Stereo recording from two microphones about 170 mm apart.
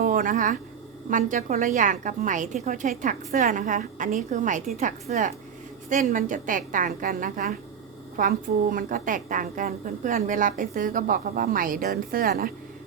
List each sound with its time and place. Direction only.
0.0 s a woman's voice: 55° right (ahead or behind)